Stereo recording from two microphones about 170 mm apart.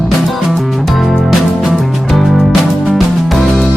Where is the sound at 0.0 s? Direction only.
Centre (ahead or behind).